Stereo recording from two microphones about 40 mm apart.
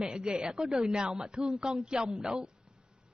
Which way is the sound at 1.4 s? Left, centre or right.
Centre.